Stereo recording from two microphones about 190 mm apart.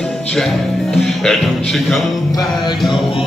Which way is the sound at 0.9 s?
Centre (ahead or behind).